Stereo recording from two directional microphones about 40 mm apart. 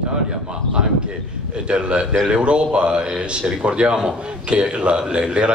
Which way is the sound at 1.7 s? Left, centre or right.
Right.